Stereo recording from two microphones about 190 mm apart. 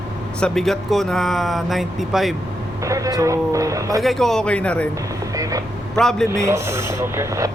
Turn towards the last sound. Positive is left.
turn(degrees=-15)  # may be behind; listen again after turning